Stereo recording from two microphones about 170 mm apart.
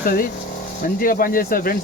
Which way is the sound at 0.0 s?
60° left (ahead or behind).